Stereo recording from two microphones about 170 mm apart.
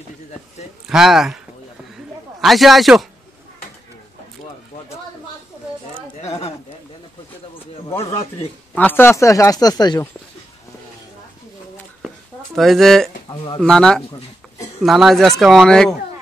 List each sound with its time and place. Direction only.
0.8 s speech: 5° right (ahead or behind)
2.4 s speech: centre (ahead or behind)
6.1 s a sound: 40° left (ahead or behind)
8.7 s speech: 10° left (ahead or behind)
12.5 s speech: centre (ahead or behind)
13.3 s speech: 30° left (ahead or behind)
13.6 s speech: 5° left (ahead or behind)